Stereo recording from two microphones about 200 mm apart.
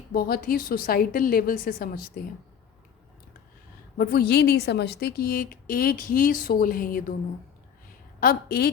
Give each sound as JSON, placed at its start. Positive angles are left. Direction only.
{"t": 0.1, "sound": "a woman's voice", "side_deg": 50}
{"t": 3.9, "sound": "a woman's voice", "side_deg": 50}
{"t": 8.2, "sound": "a woman's voice", "side_deg": 50}